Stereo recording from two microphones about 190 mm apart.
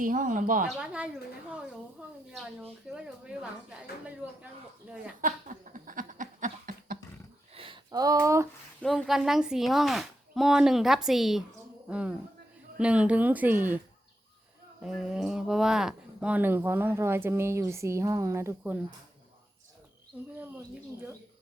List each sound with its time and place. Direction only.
0.0 s speech: 45° right (ahead or behind)
0.8 s speech: 5° right (ahead or behind)
2.9 s speech: 5° right (ahead or behind)
5.2 s a sound: 45° right (ahead or behind)
7.5 s a sound: 25° right (ahead or behind)
8.8 s speech: centre (ahead or behind)
20.1 s speech: 10° right (ahead or behind)